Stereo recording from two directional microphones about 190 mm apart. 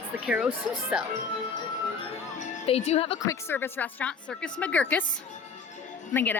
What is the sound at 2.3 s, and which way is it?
Music, 35° left (ahead or behind).